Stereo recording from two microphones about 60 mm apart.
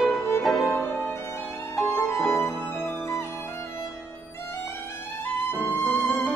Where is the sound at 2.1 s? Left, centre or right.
Centre.